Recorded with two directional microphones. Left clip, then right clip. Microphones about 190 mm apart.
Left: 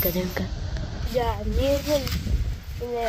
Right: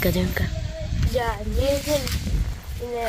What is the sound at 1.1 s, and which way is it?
Speech, 10° left (ahead or behind).